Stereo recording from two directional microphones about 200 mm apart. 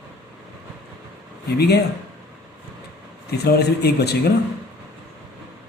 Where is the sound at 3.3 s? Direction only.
55° left (ahead or behind).